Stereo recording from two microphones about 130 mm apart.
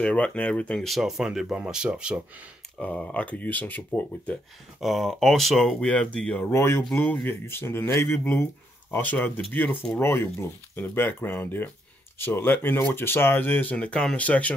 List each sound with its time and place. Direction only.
0.0 s speech: 10° left (ahead or behind); by 2.1 s 5° right (ahead or behind)
2.8 s speech: 10° left (ahead or behind)
4.7 s speech: centre (ahead or behind)